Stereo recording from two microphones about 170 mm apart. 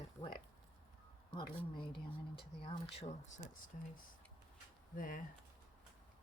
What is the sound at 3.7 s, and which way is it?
Speech, 50° left (ahead or behind).